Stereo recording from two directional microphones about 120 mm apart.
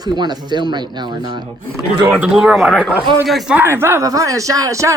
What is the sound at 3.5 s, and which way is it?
Speech, 20° right (ahead or behind).